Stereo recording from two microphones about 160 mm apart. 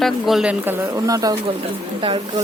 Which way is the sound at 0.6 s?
15° right (ahead or behind).